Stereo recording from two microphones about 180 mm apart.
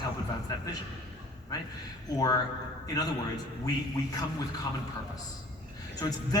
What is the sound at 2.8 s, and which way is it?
Speech, 20° left (ahead or behind).